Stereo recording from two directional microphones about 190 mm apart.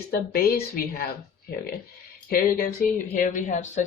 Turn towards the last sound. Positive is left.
turn(degrees=40)  # may be behind; listen again after turning